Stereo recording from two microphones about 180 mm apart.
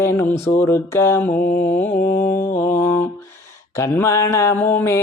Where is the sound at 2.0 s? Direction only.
55° left (ahead or behind).